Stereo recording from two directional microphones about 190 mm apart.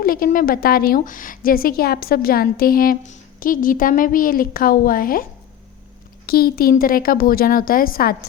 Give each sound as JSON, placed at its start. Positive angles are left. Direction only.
{"t": 0.0, "sound": "a woman's voice", "side_deg": 50}
{"t": 6.2, "sound": "a woman's voice", "side_deg": 50}